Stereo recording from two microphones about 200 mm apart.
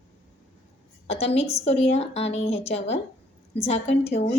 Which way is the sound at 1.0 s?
30° left (ahead or behind).